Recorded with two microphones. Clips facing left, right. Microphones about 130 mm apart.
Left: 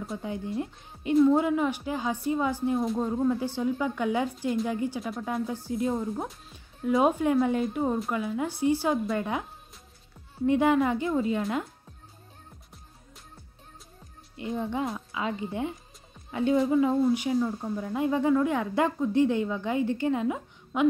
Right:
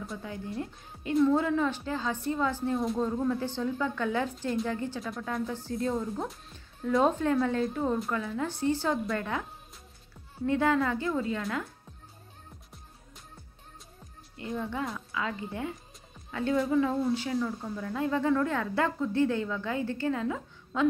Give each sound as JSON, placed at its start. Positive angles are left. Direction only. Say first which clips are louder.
{"t": 0.1, "sound": "speech", "louder": "left 7 dB", "side_deg": 25}
{"t": 14.3, "sound": "speech", "louder": "left 3 dB", "side_deg": 20}